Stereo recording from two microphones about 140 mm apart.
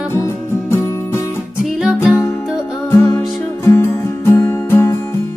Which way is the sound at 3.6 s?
20° left (ahead or behind).